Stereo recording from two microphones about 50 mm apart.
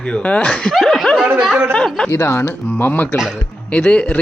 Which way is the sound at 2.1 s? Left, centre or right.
Left.